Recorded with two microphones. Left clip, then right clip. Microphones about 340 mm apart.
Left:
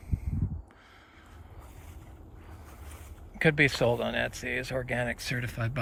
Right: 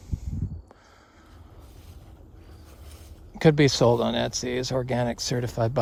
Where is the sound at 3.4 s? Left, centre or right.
Centre.